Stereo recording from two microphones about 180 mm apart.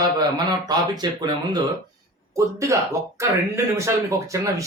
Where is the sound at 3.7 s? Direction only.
15° right (ahead or behind).